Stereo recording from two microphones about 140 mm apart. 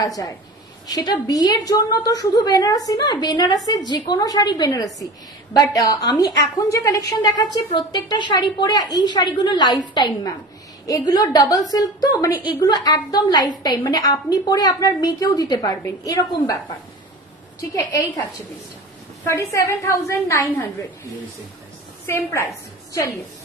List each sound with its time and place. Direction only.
0.0 s a woman's voice: 25° left (ahead or behind)
17.7 s a woman's voice: 25° left (ahead or behind)
19.2 s a woman's voice: 20° left (ahead or behind)
22.0 s a woman's voice: 20° left (ahead or behind)